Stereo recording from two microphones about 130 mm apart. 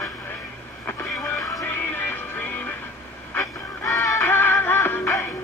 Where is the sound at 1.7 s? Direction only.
15° left (ahead or behind).